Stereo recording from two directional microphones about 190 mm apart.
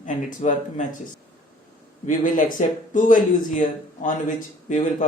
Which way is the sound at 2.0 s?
45° left (ahead or behind).